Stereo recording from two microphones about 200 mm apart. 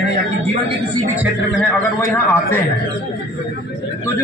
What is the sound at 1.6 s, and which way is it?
Speech, 10° left (ahead or behind).